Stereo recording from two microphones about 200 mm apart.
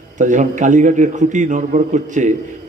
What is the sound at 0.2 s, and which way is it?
A man's voice, 40° right (ahead or behind).